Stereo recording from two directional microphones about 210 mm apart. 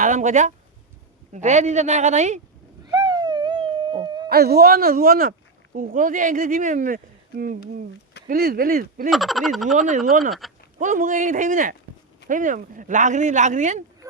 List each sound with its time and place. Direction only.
0.0 s speech: 35° right (ahead or behind)
2.8 s hoot: 20° right (ahead or behind)
4.3 s speech: 50° right (ahead or behind)
9.0 s speech: centre (ahead or behind)
9.7 s speech: 35° right (ahead or behind)
14.0 s a sound: 15° right (ahead or behind)